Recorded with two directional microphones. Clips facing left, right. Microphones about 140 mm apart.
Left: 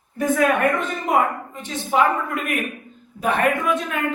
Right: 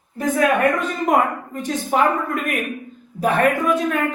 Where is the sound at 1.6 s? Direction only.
45° right (ahead or behind).